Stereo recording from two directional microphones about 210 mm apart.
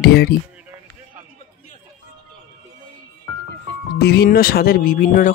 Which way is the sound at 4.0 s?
50° left (ahead or behind).